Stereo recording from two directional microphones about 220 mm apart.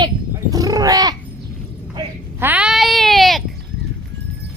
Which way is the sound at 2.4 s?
5° right (ahead or behind).